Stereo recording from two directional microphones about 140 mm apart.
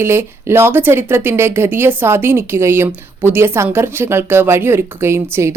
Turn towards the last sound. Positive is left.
turn(degrees=-20)  # may be behind; listen again after turning